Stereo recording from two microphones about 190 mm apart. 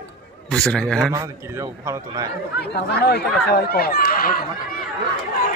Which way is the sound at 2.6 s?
60° left (ahead or behind).